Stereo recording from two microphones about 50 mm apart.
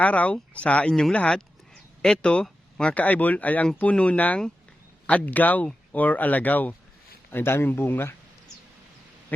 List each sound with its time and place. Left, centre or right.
0.0 s speech: left
1.4 s a sound: centre
2.9 s speech: left
7.3 s speech: left